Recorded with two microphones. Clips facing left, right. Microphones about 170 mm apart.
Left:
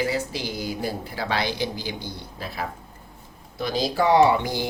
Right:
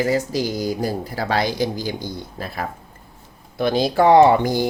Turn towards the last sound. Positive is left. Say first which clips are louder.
# right 5 dB
turn(degrees=-45)  # may be behind; listen again after turning